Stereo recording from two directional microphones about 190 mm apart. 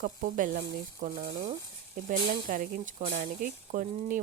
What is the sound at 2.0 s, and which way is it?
Speech, 45° right (ahead or behind).